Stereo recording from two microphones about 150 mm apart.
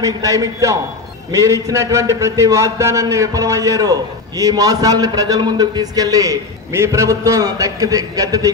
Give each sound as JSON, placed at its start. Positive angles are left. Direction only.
{"t": 0.0, "sound": "speech", "side_deg": -20}